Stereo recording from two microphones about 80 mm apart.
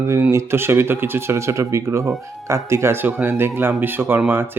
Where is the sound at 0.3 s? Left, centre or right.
Right.